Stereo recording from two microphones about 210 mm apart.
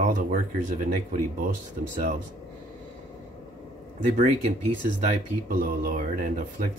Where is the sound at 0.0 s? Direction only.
40° right (ahead or behind).